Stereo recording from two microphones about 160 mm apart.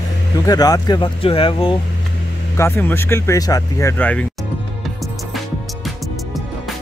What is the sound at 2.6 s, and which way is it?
Speech, 15° left (ahead or behind).